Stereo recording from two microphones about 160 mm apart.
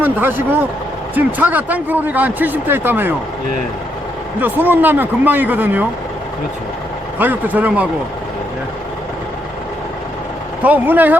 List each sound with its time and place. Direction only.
0.0 s speech: 10° right (ahead or behind)
4.4 s speech: 10° right (ahead or behind)
7.2 s speech: 10° right (ahead or behind)
10.6 s speech: 10° right (ahead or behind)